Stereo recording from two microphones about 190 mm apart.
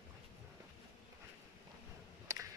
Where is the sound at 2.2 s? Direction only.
15° right (ahead or behind).